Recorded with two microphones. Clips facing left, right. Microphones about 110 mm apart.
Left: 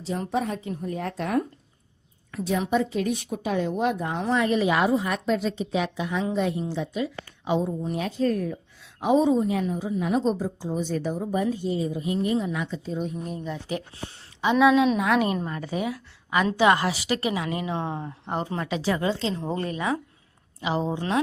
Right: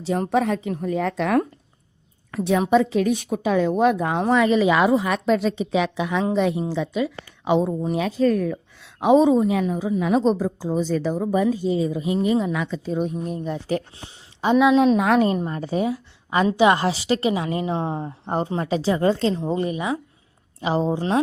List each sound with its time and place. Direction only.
0.3 s a woman's voice: 90° right
2.3 s a woman's voice: 75° right (ahead or behind)
13.0 s speech: 45° right (ahead or behind)
15.4 s a woman's voice: 30° right (ahead or behind)
16.5 s a woman's voice: 20° right (ahead or behind)
19.0 s speech: 50° right (ahead or behind)
19.4 s speech: 15° right (ahead or behind)
20.6 s a woman's voice: 35° right (ahead or behind)